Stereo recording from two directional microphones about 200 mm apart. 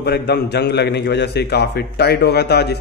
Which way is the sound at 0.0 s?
55° left (ahead or behind).